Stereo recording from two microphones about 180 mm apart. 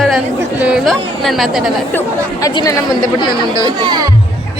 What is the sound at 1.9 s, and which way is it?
Speech, 10° left (ahead or behind).